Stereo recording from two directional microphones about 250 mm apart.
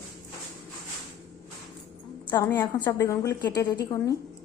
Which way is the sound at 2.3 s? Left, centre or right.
Centre.